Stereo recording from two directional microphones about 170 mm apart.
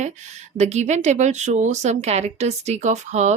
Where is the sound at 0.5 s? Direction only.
40° right (ahead or behind).